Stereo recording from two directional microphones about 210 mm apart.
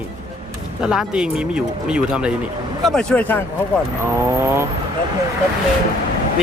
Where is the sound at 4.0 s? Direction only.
10° right (ahead or behind).